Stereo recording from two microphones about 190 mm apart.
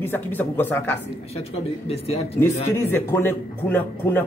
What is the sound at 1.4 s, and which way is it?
Speech, 30° left (ahead or behind).